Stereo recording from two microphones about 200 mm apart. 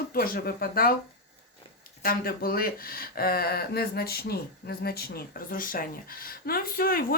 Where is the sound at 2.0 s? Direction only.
50° left (ahead or behind).